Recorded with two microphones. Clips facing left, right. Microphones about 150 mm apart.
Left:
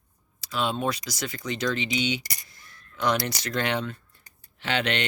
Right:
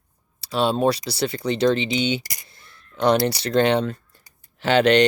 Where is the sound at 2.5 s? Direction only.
30° right (ahead or behind).